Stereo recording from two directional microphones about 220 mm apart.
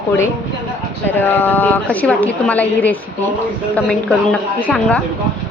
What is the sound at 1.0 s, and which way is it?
A woman's voice, 10° left (ahead or behind).